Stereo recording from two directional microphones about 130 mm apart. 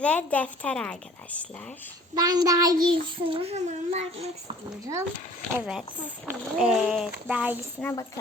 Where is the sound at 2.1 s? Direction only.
30° right (ahead or behind).